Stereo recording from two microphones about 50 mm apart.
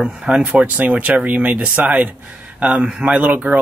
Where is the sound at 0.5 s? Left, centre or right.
Right.